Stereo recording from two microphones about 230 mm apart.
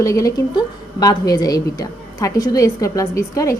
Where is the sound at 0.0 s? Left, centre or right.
Centre.